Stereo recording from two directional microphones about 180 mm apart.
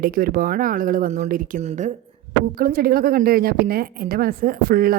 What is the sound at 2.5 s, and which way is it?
A woman's voice, 55° right (ahead or behind).